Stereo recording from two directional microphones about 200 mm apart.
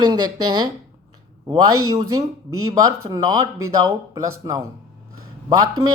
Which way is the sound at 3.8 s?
15° right (ahead or behind).